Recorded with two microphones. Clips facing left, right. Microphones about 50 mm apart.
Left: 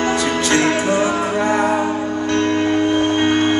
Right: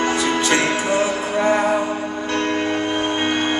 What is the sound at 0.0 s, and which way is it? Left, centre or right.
Music, centre.